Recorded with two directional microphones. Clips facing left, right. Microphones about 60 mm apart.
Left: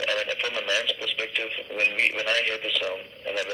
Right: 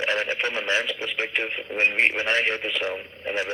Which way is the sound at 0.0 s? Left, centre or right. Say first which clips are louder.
Right 2 dB; right.